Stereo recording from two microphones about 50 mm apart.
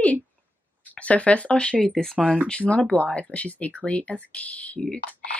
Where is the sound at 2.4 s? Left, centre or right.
Left.